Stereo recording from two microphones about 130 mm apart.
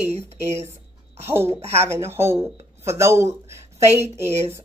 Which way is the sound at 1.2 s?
20° right (ahead or behind).